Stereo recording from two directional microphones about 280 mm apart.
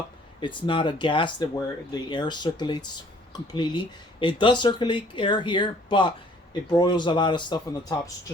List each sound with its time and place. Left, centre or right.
0.3 s speech: centre